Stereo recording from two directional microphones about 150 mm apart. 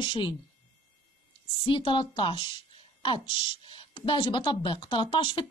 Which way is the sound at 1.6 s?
35° left (ahead or behind).